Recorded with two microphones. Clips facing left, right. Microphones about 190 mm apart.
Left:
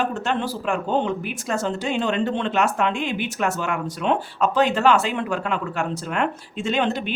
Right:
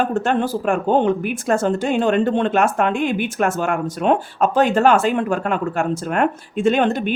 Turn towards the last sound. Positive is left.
turn(degrees=-50)  # may be behind; listen again after turning